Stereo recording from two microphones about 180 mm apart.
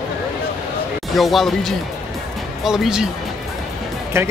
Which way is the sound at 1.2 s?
Centre (ahead or behind).